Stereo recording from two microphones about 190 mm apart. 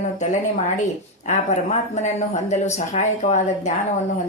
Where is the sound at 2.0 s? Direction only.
40° left (ahead or behind).